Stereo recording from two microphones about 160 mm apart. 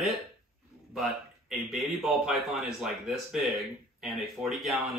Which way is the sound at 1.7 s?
Centre (ahead or behind).